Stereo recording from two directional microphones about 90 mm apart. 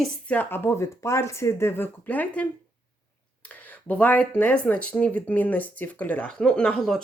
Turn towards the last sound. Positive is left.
turn(degrees=5)  # may be behind; listen again after turning